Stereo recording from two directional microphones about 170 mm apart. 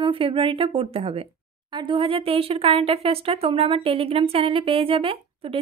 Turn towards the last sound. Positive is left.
turn(degrees=-35)  # may be behind; listen again after turning